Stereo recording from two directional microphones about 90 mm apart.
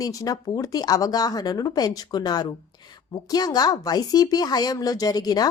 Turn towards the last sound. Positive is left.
turn(degrees=45)  # may be behind; listen again after turning